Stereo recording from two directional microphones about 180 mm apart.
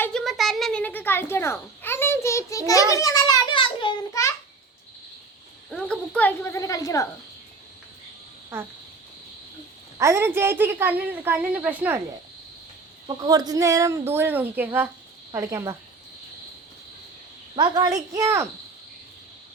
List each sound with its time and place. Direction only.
0.0 s fowl: 5° left (ahead or behind); by 4.3 s 20° left (ahead or behind)
5.7 s speech: 5° left (ahead or behind)
10.0 s a woman's voice: 15° right (ahead or behind)
13.1 s a woman's voice: 20° right (ahead or behind)
17.5 s a woman's voice: 25° right (ahead or behind)